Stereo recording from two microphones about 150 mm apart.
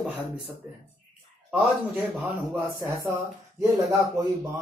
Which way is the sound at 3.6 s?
25° right (ahead or behind).